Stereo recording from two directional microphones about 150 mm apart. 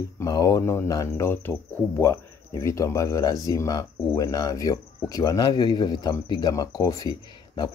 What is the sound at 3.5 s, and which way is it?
Cricket, 25° left (ahead or behind).